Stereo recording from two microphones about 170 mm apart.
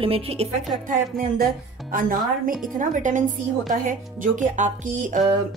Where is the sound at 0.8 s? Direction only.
55° right (ahead or behind).